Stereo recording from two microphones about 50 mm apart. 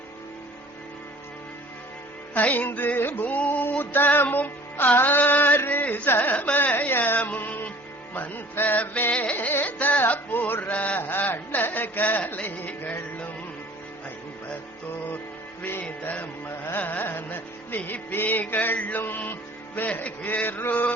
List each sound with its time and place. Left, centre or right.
2.3 s music: left
4.9 s mantra: left
5.5 s a sound: left
6.1 s carnatic music: left
7.2 s music: left
11.0 s a sound: left
12.8 s music: left
15.8 s music: left
19.9 s a man's voice: left
20.2 s music: left